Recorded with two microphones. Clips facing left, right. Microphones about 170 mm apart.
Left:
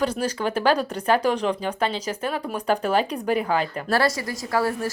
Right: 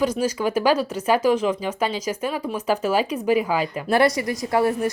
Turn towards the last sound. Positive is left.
turn(degrees=-20)  # may be behind; listen again after turning